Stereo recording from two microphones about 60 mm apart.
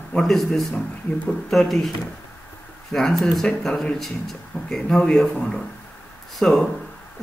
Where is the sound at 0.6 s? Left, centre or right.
Centre.